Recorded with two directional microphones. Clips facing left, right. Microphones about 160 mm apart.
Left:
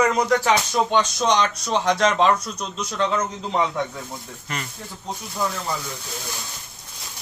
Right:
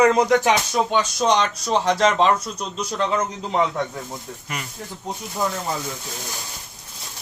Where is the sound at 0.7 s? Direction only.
5° right (ahead or behind).